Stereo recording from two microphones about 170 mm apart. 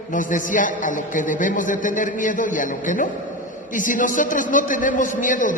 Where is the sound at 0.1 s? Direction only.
50° left (ahead or behind).